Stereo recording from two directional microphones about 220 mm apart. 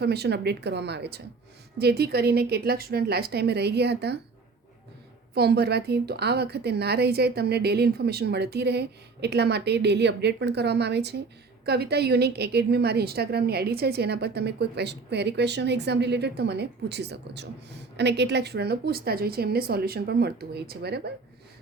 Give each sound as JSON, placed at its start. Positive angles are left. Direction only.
{"t": 0.0, "sound": "a woman's voice", "side_deg": -45}
{"t": 5.3, "sound": "a woman's voice", "side_deg": -45}